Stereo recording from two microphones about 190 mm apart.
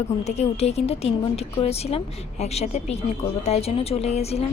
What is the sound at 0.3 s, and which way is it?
A woman's voice, 35° left (ahead or behind).